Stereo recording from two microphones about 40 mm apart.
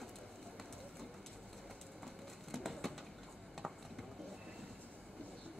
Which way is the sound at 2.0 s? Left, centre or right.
Centre.